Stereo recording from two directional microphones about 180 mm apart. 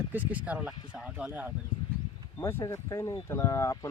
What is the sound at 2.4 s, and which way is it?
Speech, 15° left (ahead or behind).